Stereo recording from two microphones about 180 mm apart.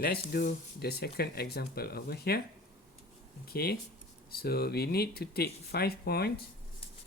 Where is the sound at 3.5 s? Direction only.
60° left (ahead or behind).